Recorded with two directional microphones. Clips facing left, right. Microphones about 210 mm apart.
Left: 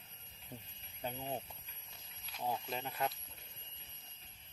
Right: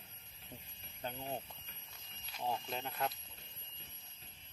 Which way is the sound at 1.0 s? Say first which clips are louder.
Left 1 dB; 10° left (ahead or behind).